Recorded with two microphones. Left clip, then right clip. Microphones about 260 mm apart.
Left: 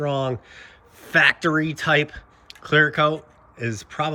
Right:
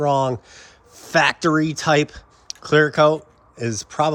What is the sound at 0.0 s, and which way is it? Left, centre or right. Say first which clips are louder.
Speech: right 6 dB; centre.